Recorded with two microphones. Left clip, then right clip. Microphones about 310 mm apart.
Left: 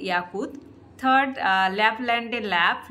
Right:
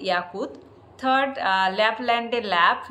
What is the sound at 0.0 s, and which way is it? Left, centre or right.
A woman's voice, centre.